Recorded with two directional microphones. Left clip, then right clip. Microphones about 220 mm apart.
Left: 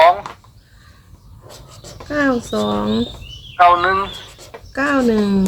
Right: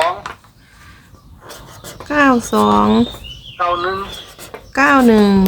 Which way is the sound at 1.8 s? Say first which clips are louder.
Right 5 dB; 20° right (ahead or behind).